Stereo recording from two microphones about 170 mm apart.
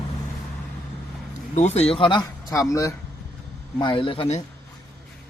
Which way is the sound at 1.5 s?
40° left (ahead or behind).